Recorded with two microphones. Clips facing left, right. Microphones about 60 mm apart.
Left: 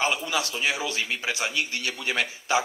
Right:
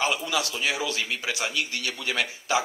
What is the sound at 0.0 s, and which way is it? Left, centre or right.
A man's voice, left.